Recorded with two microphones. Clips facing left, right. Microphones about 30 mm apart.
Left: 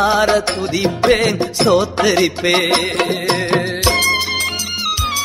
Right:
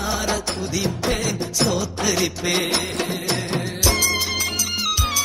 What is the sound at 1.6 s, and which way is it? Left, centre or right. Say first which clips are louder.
Music: left 9 dB; left.